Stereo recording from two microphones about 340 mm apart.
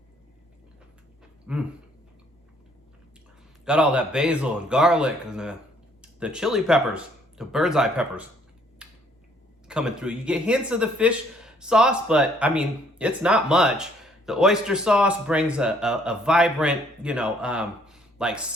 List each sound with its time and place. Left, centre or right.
1.5 s dog: centre
3.7 s speech: centre
8.8 s a sound: centre
9.6 s speech: centre